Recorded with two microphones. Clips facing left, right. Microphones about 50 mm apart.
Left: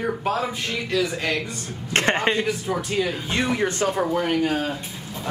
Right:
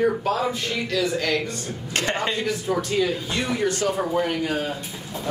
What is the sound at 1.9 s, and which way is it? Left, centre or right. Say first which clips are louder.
Speech: left 4 dB; left.